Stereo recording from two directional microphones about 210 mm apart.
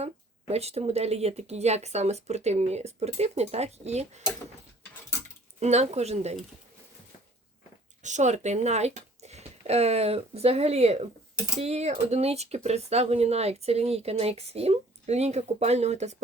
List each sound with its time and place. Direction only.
0.0 s speech: 30° right (ahead or behind)
5.5 s speech: 30° right (ahead or behind)
8.0 s speech: 35° right (ahead or behind)